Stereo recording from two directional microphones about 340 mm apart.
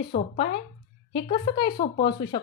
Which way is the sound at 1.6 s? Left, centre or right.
Left.